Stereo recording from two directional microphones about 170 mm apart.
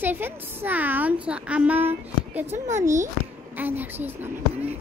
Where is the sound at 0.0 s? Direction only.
10° right (ahead or behind).